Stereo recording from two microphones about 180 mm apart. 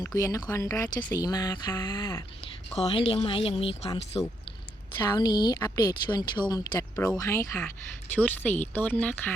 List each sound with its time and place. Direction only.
0.0 s speech: 20° left (ahead or behind)
2.7 s speech: 30° left (ahead or behind)
4.9 s speech: 20° left (ahead or behind)